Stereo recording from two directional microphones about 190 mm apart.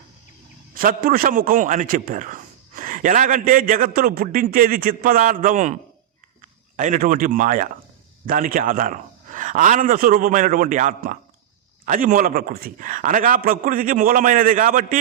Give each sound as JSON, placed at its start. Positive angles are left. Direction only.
{"t": 0.7, "sound": "a man's voice", "side_deg": -50}